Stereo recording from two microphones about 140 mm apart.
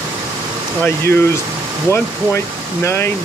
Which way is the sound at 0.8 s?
15° left (ahead or behind).